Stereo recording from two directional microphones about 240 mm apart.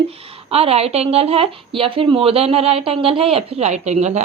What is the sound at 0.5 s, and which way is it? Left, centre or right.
Speech, right.